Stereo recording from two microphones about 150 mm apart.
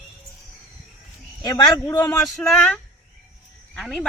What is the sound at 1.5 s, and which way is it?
Speech, 25° left (ahead or behind).